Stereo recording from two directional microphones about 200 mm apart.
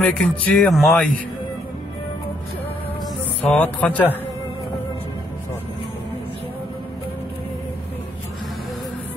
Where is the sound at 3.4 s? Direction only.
5° left (ahead or behind).